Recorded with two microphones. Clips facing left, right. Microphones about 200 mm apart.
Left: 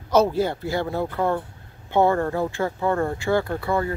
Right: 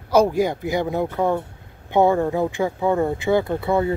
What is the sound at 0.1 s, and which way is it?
Speech, 15° right (ahead or behind).